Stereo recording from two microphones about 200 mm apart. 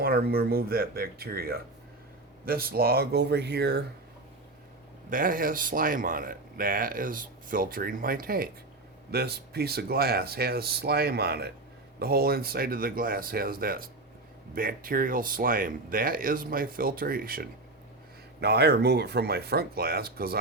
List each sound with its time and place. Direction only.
0.0 s speech: 50° right (ahead or behind)
5.1 s speech: 45° right (ahead or behind)